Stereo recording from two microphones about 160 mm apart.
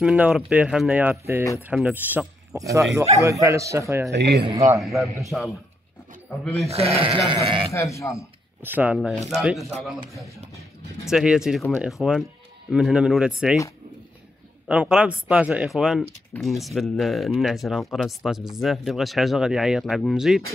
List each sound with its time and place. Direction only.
0.0 s a man's voice: 5° right (ahead or behind)
4.1 s speech: 90° right
4.5 s a man's voice: 40° right (ahead or behind)
4.8 s speech: centre (ahead or behind)
6.7 s a man's voice: 40° right (ahead or behind)
7.7 s speech: 20° left (ahead or behind)
8.6 s speech: 10° right (ahead or behind)
11.1 s speech: 5° right (ahead or behind)
14.7 s speech: 5° right (ahead or behind)